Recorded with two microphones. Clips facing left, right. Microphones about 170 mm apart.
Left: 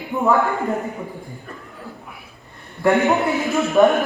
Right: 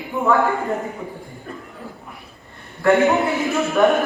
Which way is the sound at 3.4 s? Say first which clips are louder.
Even; centre (ahead or behind).